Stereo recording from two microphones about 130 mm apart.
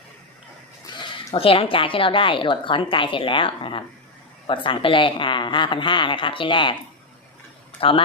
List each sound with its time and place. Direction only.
0.9 s speech: 40° left (ahead or behind)
7.8 s a man's voice: 45° left (ahead or behind)